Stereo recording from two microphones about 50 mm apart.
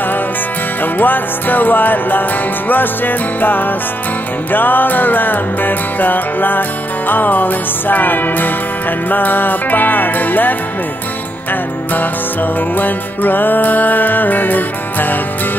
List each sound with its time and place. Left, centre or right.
0.9 s music: left
12.7 s music: left